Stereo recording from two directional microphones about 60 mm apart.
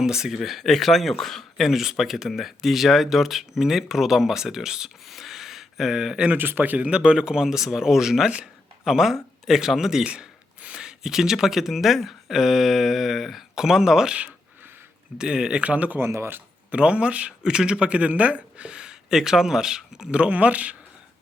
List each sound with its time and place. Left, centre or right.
0.0 s speech: centre
5.0 s a sound: centre
6.3 s speech: right; by 8.4 s centre
8.8 s speech: centre
10.1 s speech: centre
15.2 s speech: centre
15.6 s speech: right
16.0 s speech: right
16.7 s speech: centre
20.1 s speech: right